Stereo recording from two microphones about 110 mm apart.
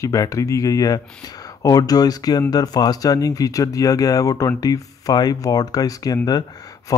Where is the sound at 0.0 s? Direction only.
30° left (ahead or behind).